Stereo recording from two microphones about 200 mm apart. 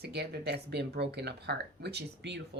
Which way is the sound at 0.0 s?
55° right (ahead or behind).